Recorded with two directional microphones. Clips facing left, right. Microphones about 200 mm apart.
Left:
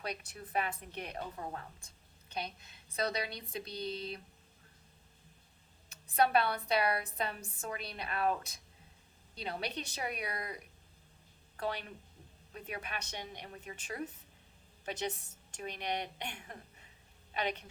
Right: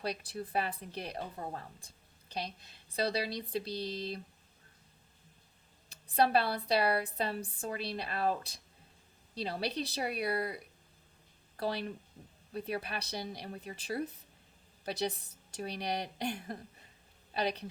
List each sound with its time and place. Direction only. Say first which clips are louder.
0.0 s a woman's voice: right 5 dB; 35° right (ahead or behind)
6.1 s a woman's voice: right 1 dB; 30° right (ahead or behind)